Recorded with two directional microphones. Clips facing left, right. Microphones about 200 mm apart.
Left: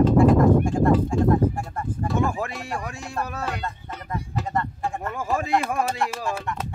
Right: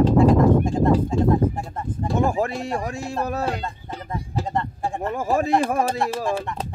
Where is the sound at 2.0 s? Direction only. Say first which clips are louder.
Right 4 dB; 35° right (ahead or behind).